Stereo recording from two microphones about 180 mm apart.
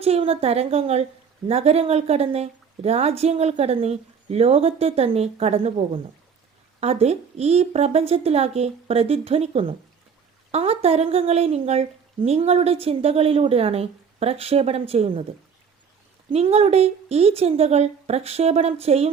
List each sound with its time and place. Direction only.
0.0 s speech: 35° right (ahead or behind)
16.3 s speech: 35° right (ahead or behind)